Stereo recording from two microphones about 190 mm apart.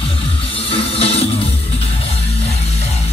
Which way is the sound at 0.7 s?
30° left (ahead or behind).